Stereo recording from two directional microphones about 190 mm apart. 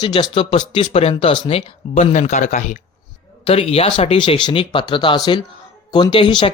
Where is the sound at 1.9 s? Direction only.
40° left (ahead or behind).